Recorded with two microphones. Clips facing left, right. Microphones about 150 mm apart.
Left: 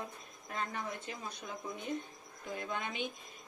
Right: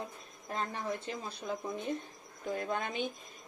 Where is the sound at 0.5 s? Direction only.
30° right (ahead or behind).